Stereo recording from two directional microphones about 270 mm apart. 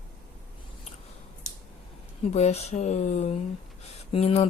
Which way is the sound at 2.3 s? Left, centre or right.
Left.